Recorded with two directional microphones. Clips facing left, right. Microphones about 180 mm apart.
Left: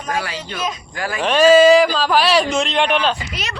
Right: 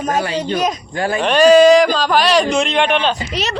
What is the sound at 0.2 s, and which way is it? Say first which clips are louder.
Speech: right 7 dB; 25° right (ahead or behind).